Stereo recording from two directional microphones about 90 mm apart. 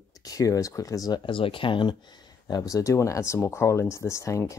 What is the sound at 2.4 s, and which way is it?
Speech, 40° left (ahead or behind).